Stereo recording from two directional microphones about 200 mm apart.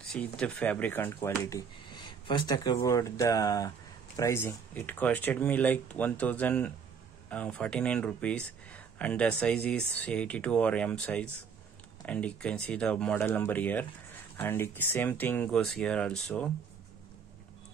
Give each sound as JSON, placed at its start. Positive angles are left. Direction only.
{"t": 0.1, "sound": "speech", "side_deg": 5}